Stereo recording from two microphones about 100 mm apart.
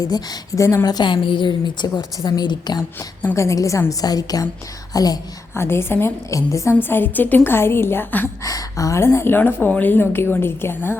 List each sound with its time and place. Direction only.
0.0 s a woman's voice: 40° left (ahead or behind)
0.9 s a woman's voice: 50° left (ahead or behind)
3.3 s a woman's voice: 30° left (ahead or behind)
5.5 s a woman's voice: 25° left (ahead or behind)
8.4 s a woman's voice: 35° left (ahead or behind)